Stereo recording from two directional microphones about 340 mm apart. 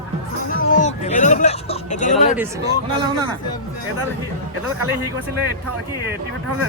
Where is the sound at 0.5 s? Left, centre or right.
Left.